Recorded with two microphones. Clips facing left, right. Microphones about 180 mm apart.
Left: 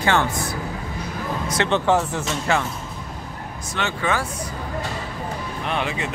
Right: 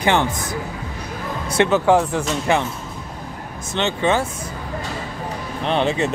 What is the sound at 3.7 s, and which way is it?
Speech, 25° right (ahead or behind).